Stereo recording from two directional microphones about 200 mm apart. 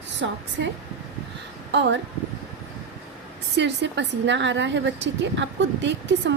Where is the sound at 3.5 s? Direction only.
60° right (ahead or behind).